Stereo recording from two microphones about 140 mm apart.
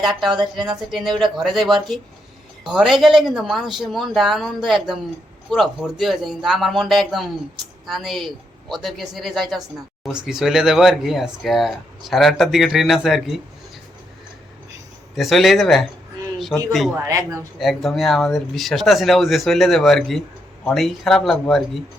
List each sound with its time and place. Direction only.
0.0 s speech: centre (ahead or behind)
15.1 s speech: centre (ahead or behind)
16.9 s speech: 20° right (ahead or behind)
17.6 s speech: centre (ahead or behind)